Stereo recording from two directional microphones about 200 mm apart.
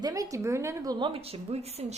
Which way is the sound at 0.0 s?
15° right (ahead or behind).